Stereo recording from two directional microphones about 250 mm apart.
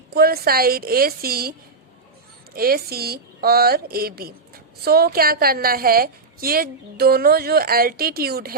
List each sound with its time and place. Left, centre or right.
0.1 s a woman's voice: right
2.6 s a woman's voice: right